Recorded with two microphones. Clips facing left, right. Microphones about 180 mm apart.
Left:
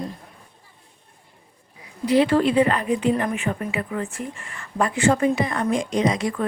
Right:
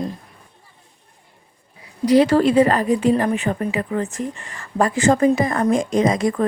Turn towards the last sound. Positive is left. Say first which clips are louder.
# right 4 dB
turn(degrees=-45)  # may be behind; listen again after turning